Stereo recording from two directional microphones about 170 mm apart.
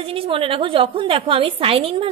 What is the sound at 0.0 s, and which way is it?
A woman's voice, 35° right (ahead or behind).